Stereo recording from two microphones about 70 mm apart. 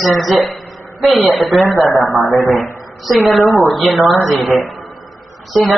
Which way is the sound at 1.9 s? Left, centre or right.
Left.